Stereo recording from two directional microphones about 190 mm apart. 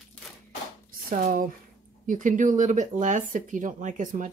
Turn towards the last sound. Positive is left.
turn(degrees=-40)  # may be behind; listen again after turning